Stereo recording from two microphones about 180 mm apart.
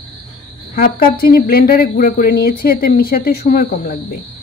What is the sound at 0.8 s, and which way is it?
Speech, 55° left (ahead or behind).